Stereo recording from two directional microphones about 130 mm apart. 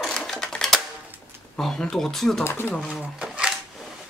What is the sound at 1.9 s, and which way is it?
Speech, centre (ahead or behind).